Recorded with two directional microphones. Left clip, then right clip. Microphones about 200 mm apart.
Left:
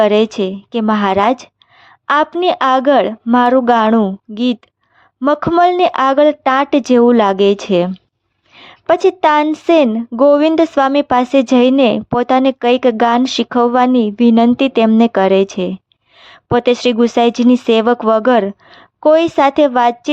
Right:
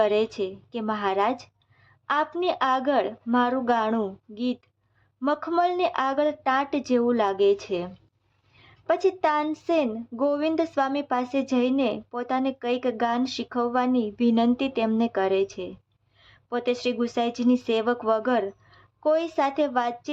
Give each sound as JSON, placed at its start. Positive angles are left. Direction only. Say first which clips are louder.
{"t": 0.0, "sound": "speech", "louder": "left 11 dB", "side_deg": 35}